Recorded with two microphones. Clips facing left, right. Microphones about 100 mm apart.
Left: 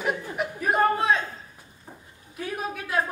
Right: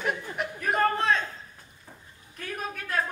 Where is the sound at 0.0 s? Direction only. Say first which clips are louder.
Left 3 dB; 5° left (ahead or behind).